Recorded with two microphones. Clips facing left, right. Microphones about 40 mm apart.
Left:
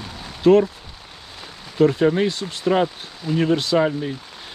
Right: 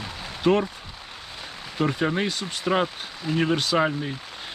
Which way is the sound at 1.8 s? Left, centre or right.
Centre.